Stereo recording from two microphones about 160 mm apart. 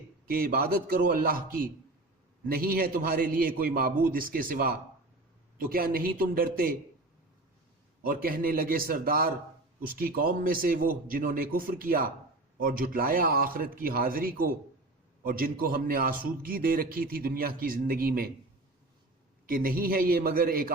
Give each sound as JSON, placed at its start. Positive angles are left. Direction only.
{"t": 0.3, "sound": "a man's voice", "side_deg": -65}
{"t": 8.0, "sound": "a man's voice", "side_deg": -65}
{"t": 19.5, "sound": "a man's voice", "side_deg": -65}